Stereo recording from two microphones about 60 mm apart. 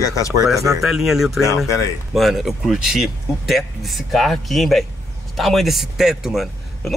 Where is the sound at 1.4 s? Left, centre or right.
Left.